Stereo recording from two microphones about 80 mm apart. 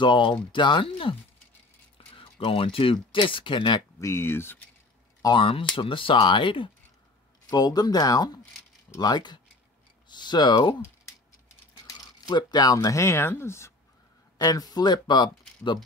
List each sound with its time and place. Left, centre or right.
0.0 s speech: left
0.5 s speech: left
2.1 s speech: left
4.0 s speech: left
5.3 s speech: left
7.4 s speech: left
11.9 s speech: left
14.4 s speech: left